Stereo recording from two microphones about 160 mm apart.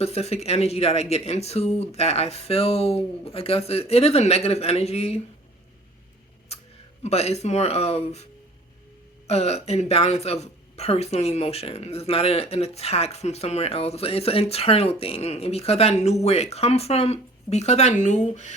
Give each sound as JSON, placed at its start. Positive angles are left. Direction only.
{"t": 0.0, "sound": "speech", "side_deg": 40}
{"t": 6.5, "sound": "a sound", "side_deg": 40}
{"t": 7.0, "sound": "speech", "side_deg": 40}